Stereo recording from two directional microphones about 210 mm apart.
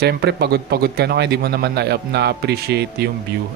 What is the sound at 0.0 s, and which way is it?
A man's voice, 50° right (ahead or behind).